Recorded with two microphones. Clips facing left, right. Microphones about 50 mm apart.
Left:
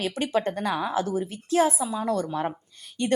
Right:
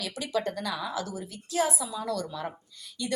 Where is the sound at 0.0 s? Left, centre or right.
Left.